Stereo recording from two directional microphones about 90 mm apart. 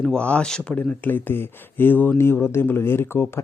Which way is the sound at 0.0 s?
10° left (ahead or behind).